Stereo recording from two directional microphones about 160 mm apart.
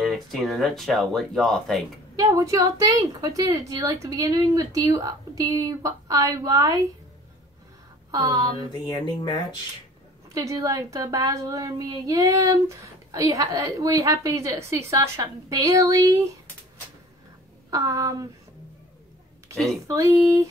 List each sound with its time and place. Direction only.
0.0 s speech: centre (ahead or behind)
2.1 s a woman's voice: 20° right (ahead or behind)
8.1 s a woman's voice: 25° right (ahead or behind)
8.8 s speech: 25° left (ahead or behind)
10.3 s a woman's voice: 20° right (ahead or behind)
17.6 s a woman's voice: 20° right (ahead or behind)
19.5 s a woman's voice: centre (ahead or behind)
19.9 s a woman's voice: 20° right (ahead or behind)